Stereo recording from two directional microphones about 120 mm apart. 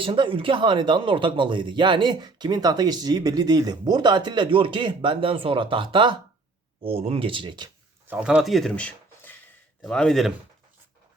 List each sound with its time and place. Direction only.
0.0 s speech: 45° right (ahead or behind)
6.8 s speech: 55° right (ahead or behind)
8.0 s speech: 10° right (ahead or behind)